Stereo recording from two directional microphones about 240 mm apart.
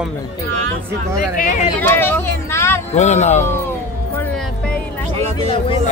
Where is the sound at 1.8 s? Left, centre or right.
Centre.